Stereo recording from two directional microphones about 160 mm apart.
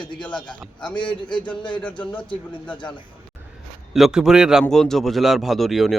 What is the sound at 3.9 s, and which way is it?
Speech, centre (ahead or behind).